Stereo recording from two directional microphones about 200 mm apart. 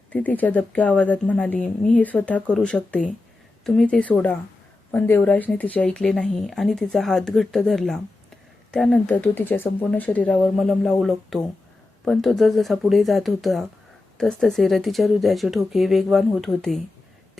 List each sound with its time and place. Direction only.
0.1 s speech: 10° left (ahead or behind)